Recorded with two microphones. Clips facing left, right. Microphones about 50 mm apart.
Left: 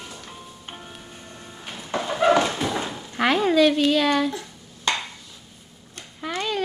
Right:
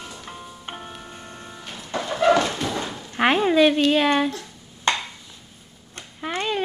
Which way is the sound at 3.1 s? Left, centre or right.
Right.